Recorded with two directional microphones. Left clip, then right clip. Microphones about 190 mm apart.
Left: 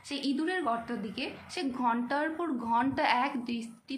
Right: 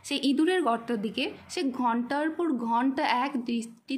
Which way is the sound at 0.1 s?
55° right (ahead or behind).